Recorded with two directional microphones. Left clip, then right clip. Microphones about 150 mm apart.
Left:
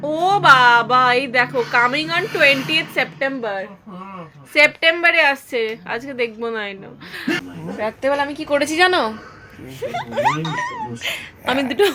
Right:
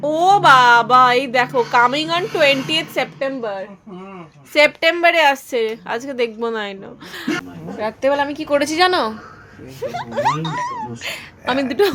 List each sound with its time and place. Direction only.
0.0 s a woman's voice: 25° right (ahead or behind)
3.2 s a woman's voice: 10° right (ahead or behind)
4.5 s a woman's voice: 30° right (ahead or behind)
8.7 s speech: 5° right (ahead or behind)